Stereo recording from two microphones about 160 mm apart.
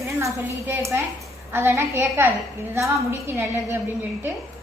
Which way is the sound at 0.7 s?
15° right (ahead or behind).